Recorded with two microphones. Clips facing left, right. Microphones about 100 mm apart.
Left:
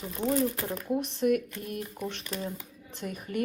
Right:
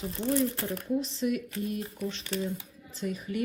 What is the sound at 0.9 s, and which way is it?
Speech, 55° left (ahead or behind).